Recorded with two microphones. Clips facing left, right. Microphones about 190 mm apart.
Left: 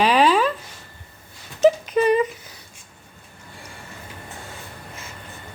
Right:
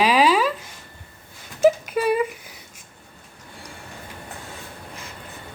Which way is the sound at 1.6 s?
5° right (ahead or behind).